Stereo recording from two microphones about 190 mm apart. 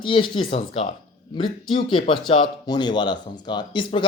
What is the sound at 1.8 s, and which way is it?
A man's voice, 25° left (ahead or behind).